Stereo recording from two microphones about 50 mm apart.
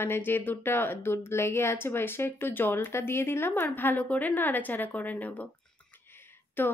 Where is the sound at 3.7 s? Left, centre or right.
Left.